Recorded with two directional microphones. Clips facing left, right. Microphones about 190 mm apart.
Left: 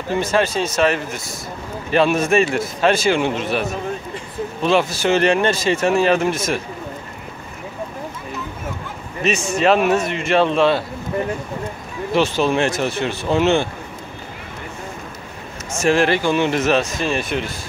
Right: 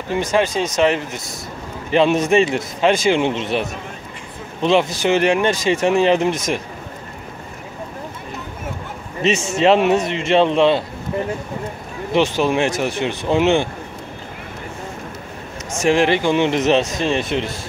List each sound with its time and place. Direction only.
0.1 s a man's voice: 15° right (ahead or behind)
9.2 s a man's voice: 20° right (ahead or behind)
12.1 s speech: 15° right (ahead or behind)
15.8 s a man's voice: 15° right (ahead or behind)